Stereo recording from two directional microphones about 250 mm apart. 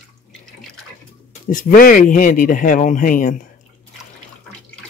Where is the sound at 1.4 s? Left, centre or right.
Left.